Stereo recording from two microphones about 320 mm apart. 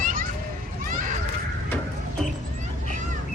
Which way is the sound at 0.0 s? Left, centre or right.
Right.